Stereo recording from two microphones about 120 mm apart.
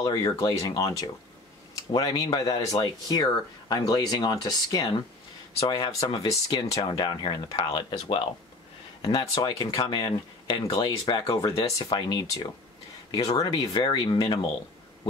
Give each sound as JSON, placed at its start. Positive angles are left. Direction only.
{"t": 0.0, "sound": "speech", "side_deg": 35}
{"t": 9.4, "sound": "speech", "side_deg": 35}